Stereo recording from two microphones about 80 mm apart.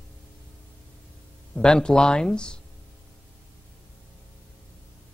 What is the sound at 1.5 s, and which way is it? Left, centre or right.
Speech, centre.